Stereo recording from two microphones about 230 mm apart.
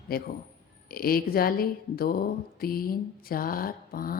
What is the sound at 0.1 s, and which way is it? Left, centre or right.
A woman's voice, left.